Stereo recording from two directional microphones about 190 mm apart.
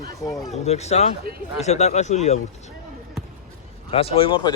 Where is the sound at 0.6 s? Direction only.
35° left (ahead or behind).